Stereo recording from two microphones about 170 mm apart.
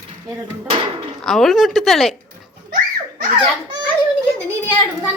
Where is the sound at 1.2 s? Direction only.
Centre (ahead or behind).